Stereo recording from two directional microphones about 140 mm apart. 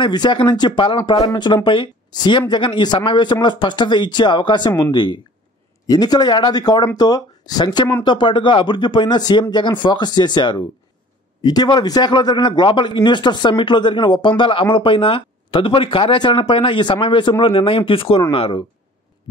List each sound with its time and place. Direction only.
0.0 s speech: 35° left (ahead or behind)